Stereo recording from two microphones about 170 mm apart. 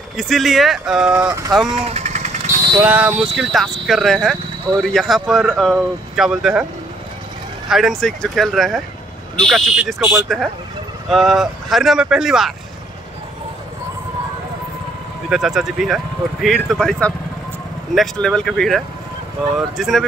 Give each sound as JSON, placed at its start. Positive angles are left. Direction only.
{"t": 0.2, "sound": "speech", "side_deg": 0}
{"t": 1.1, "sound": "speech", "side_deg": -15}
{"t": 1.7, "sound": "vehicle", "side_deg": -35}
{"t": 2.8, "sound": "speech", "side_deg": -10}
{"t": 7.7, "sound": "speech", "side_deg": 0}
{"t": 15.2, "sound": "speech", "side_deg": -5}